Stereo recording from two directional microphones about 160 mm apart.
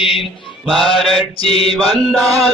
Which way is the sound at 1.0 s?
35° left (ahead or behind).